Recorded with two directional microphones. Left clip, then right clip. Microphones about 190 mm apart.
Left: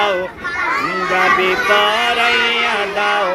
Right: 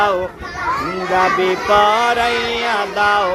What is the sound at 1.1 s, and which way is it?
Music, 15° right (ahead or behind).